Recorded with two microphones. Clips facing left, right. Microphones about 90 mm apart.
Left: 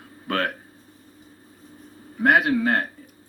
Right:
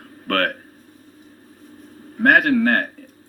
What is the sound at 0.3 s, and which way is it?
Speech, 60° right (ahead or behind).